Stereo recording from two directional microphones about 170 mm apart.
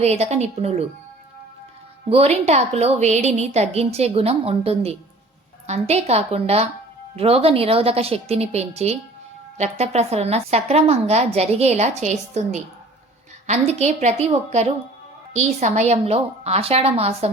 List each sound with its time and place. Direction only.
0.0 s a woman's voice: 40° right (ahead or behind)
2.0 s a woman's voice: 35° right (ahead or behind)